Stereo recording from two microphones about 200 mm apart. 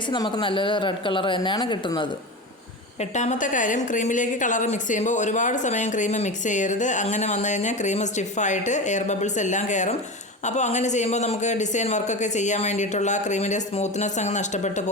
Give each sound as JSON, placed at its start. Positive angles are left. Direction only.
{"t": 0.1, "sound": "speech", "side_deg": 25}
{"t": 3.0, "sound": "a woman's voice", "side_deg": 35}